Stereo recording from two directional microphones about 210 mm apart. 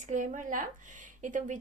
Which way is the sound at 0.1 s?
35° right (ahead or behind).